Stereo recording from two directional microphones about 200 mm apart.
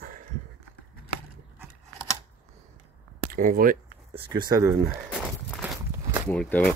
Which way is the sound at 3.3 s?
45° right (ahead or behind).